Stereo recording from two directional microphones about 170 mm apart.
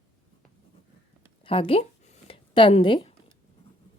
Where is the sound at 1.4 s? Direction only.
30° left (ahead or behind).